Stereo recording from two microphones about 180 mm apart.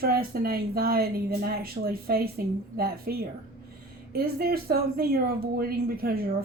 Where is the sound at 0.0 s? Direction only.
60° right (ahead or behind).